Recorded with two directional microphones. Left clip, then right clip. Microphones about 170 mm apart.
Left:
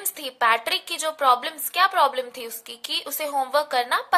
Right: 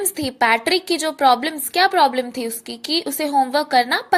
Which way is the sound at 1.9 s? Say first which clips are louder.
Right 4 dB; 10° right (ahead or behind).